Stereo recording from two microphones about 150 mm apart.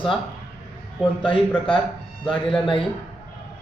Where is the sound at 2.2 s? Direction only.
5° left (ahead or behind).